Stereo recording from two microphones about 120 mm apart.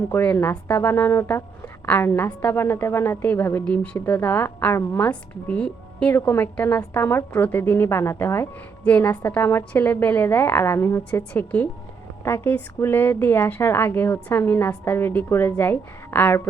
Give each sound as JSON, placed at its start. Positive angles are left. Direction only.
{"t": 0.1, "sound": "a woman's voice", "side_deg": 10}
{"t": 11.1, "sound": "speech", "side_deg": 10}
{"t": 12.2, "sound": "a woman's voice", "side_deg": 20}